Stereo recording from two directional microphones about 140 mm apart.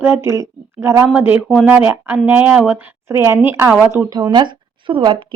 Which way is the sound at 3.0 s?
20° right (ahead or behind).